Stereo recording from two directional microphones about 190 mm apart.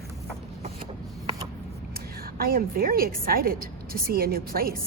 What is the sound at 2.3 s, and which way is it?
A woman's voice, 50° right (ahead or behind).